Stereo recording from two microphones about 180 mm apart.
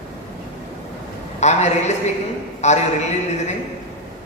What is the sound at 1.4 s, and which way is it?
A man's voice, 40° left (ahead or behind).